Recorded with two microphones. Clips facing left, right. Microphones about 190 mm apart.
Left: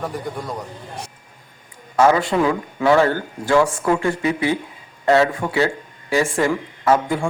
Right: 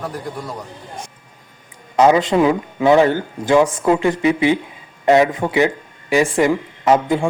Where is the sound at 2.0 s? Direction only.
20° right (ahead or behind).